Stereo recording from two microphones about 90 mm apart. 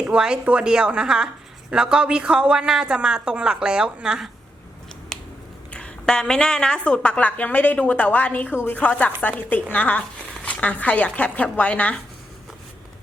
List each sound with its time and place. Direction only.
0.0 s a woman's voice: 10° right (ahead or behind)
5.1 s a sound: 5° left (ahead or behind)
5.7 s a woman's voice: 10° left (ahead or behind)